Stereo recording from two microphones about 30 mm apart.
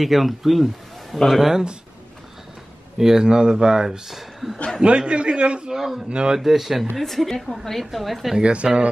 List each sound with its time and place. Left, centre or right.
0.0 s speech: centre
1.5 s speech: right
3.0 s speech: centre
3.3 s speech: right
4.1 s speech: centre
4.8 s a man's voice: right
5.7 s speech: centre
6.0 s a man's voice: right
6.3 s speech: centre
7.5 s a woman's voice: centre
7.8 s speech: centre
8.4 s a man's voice: right